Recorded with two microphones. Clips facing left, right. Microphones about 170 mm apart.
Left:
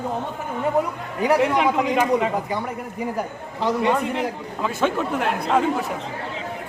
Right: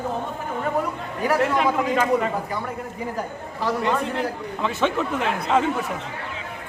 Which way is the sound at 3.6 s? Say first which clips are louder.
Left 2 dB; 15° left (ahead or behind).